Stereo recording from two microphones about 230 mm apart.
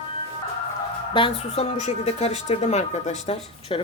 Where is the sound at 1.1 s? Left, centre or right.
Left.